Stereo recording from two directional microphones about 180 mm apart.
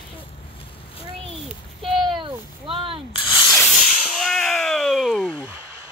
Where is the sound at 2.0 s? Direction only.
25° right (ahead or behind).